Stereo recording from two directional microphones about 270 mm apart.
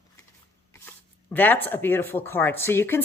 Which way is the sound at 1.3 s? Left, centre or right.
Centre.